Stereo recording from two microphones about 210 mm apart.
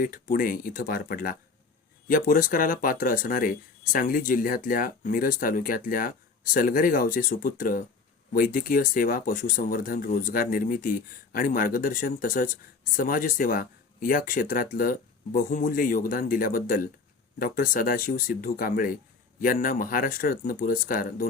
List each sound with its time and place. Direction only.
0.0 s speech: 40° left (ahead or behind)